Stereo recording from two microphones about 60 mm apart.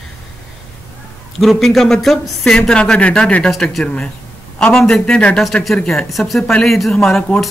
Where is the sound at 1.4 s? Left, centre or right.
Centre.